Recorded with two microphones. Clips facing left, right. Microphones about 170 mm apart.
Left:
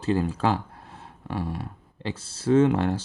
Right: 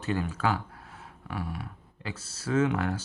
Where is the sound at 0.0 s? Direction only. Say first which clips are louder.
Left 5 dB; 30° left (ahead or behind).